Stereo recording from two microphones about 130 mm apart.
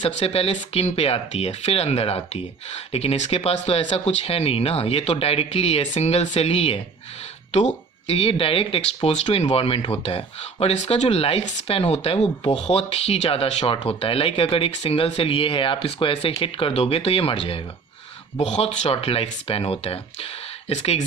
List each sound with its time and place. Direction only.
0.0 s speech: 50° left (ahead or behind)